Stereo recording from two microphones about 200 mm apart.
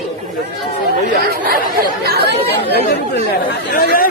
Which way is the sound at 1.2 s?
45° right (ahead or behind).